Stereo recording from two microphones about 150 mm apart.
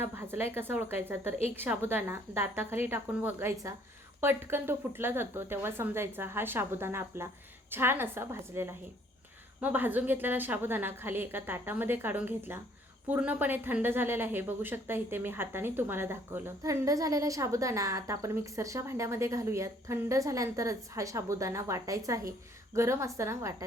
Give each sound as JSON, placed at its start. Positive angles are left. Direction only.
{"t": 0.0, "sound": "a woman's voice", "side_deg": -15}